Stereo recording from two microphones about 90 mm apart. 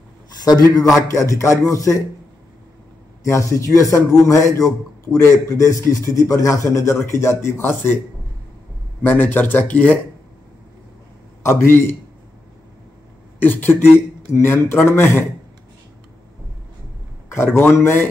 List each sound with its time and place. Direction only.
0.4 s a man's voice: 50° left (ahead or behind)
1.0 s a man's voice: 35° left (ahead or behind)
3.3 s a man's voice: 35° left (ahead or behind)
9.0 s speech: 20° left (ahead or behind)
11.6 s speech: 25° left (ahead or behind)
13.4 s speech: 20° left (ahead or behind)
17.3 s speech: 25° left (ahead or behind)